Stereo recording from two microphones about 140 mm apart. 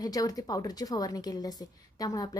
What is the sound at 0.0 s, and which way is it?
A woman's voice, 25° left (ahead or behind).